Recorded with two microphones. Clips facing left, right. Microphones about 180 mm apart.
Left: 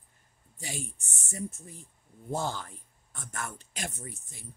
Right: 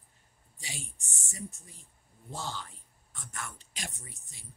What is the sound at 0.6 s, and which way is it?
Speech, 50° left (ahead or behind).